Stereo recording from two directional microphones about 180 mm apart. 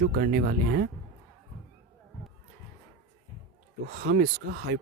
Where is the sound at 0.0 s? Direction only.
65° right (ahead or behind).